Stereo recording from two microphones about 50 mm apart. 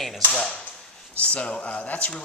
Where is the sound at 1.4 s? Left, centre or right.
Left.